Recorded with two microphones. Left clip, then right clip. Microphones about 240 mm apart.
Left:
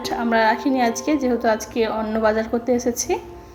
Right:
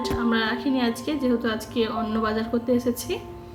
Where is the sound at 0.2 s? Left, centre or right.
Centre.